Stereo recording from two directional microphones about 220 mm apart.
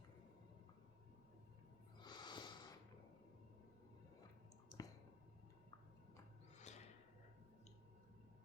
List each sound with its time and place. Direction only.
2.0 s snort: 20° left (ahead or behind)
4.7 s clicking: 20° left (ahead or behind)
6.6 s a sound: 30° left (ahead or behind)